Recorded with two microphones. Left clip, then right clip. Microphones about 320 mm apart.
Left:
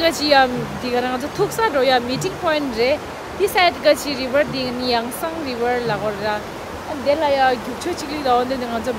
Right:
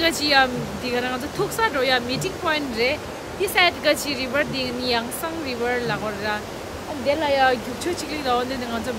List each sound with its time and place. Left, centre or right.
0.0 s speech: centre